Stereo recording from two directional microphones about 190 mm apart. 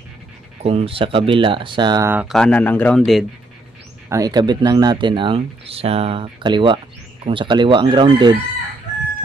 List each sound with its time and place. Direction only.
0.6 s speech: 30° right (ahead or behind)
2.0 s speech: 10° right (ahead or behind)
2.3 s a man's voice: 5° left (ahead or behind)
4.1 s speech: 20° right (ahead or behind)